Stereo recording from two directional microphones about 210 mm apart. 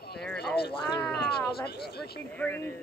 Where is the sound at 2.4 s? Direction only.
10° left (ahead or behind).